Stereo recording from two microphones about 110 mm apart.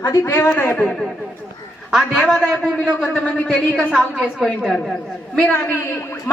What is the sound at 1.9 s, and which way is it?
A woman's voice, 5° right (ahead or behind).